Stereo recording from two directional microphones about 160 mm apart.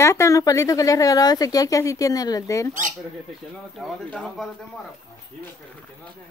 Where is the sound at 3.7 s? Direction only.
Centre (ahead or behind).